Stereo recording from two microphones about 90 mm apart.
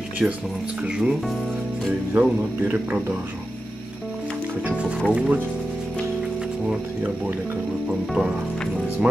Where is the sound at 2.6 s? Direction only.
20° right (ahead or behind).